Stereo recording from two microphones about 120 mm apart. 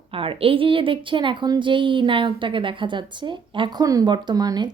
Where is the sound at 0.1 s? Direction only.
50° right (ahead or behind).